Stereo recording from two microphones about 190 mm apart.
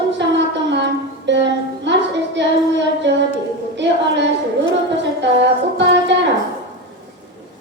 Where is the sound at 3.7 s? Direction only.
65° right (ahead or behind).